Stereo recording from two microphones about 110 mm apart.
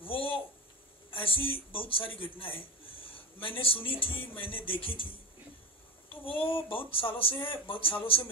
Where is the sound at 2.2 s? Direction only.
55° left (ahead or behind).